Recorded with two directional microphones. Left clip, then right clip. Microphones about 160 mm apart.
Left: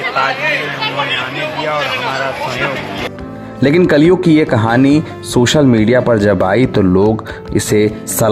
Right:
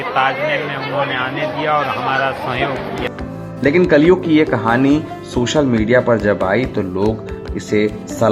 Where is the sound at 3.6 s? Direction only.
55° left (ahead or behind).